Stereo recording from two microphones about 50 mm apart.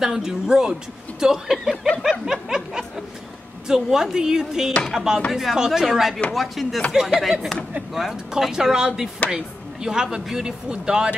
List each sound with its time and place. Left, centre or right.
0.0 s speech: centre
2.0 s snicker: centre
3.6 s speech: centre